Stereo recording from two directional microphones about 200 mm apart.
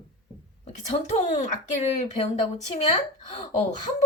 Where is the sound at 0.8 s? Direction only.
35° left (ahead or behind).